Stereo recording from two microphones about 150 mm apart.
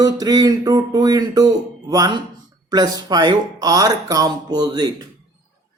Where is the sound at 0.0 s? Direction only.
25° right (ahead or behind).